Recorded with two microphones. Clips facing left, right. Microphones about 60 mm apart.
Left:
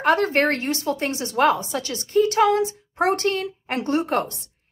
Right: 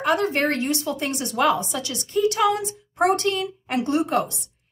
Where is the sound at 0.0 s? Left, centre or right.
Left.